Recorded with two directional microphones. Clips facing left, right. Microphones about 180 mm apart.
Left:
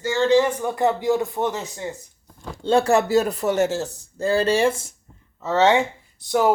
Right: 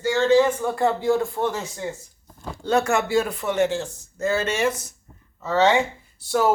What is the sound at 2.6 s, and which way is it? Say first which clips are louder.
Speech: left 3 dB; 30° left (ahead or behind).